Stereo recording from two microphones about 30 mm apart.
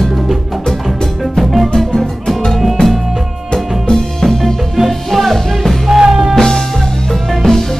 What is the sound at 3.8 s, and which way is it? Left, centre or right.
Music, centre.